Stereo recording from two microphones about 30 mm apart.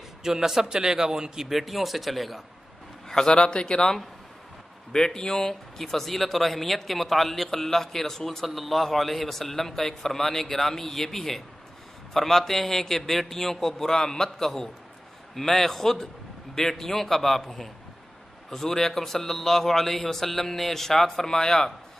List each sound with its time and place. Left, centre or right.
0.2 s speech: centre
1.4 s speech: centre
3.1 s a man's voice: centre
3.3 s speech: left
4.9 s speech: left
8.5 s speech: centre